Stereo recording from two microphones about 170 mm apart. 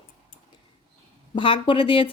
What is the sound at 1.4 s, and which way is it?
Speech, 30° left (ahead or behind).